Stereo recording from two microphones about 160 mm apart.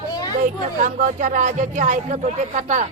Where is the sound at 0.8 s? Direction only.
55° right (ahead or behind).